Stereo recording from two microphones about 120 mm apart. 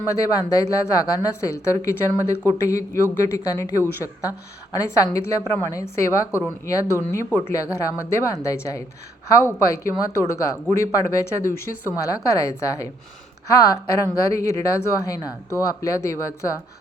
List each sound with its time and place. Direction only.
0.5 s speech: 30° left (ahead or behind)